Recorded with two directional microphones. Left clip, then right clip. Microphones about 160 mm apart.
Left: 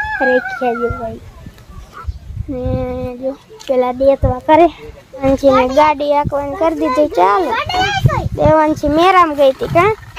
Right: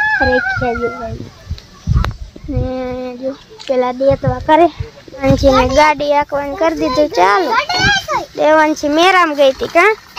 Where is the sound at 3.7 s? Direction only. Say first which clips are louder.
Left 1 dB; centre (ahead or behind).